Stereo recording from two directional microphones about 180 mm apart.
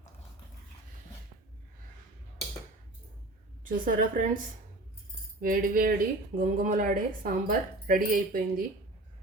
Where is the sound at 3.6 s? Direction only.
50° right (ahead or behind).